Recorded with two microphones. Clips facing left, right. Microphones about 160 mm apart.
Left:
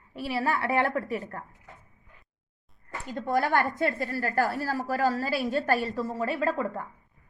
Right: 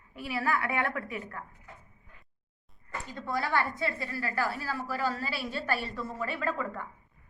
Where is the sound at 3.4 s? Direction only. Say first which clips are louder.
Left 5 dB; 50° left (ahead or behind).